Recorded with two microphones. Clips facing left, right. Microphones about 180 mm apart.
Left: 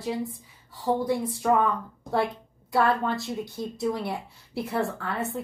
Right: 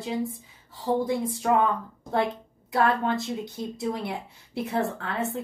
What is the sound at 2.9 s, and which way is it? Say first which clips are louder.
Speech: even; 20° right (ahead or behind).